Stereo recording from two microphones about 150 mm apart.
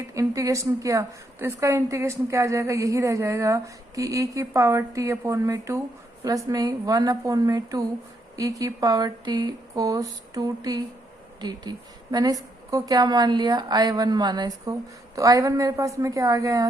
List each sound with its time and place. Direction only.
0.1 s a woman's voice: 20° right (ahead or behind)